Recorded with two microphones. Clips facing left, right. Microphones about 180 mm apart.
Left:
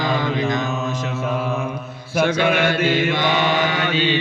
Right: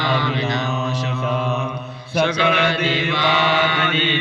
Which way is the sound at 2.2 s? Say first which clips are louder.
Left 1 dB; 50° left (ahead or behind).